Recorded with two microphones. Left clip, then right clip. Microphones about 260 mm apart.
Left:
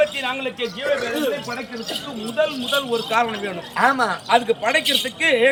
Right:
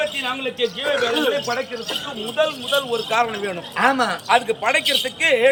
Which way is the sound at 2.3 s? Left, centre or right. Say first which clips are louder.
Right 1 dB; right.